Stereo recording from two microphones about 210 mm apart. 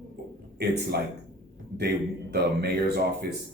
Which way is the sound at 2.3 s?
50° right (ahead or behind).